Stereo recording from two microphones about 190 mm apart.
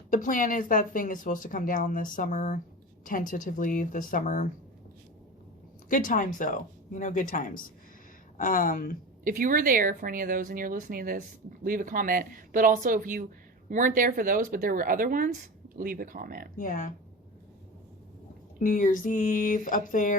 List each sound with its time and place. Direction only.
0.1 s a woman's voice: 45° left (ahead or behind)
5.9 s a woman's voice: 45° left (ahead or behind)
9.2 s speech: 45° right (ahead or behind)
16.6 s a woman's voice: 45° left (ahead or behind)
18.6 s a woman's voice: 45° left (ahead or behind)